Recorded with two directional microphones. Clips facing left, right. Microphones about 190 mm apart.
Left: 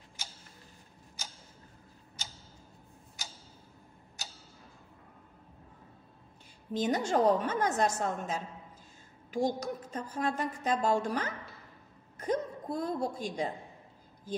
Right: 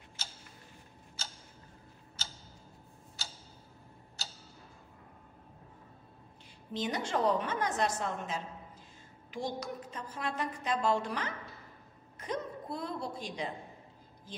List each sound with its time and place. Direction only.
0.2 s tick-tock: 15° left (ahead or behind)
3.2 s tick-tock: 15° left (ahead or behind)
6.7 s a woman's voice: 45° left (ahead or behind)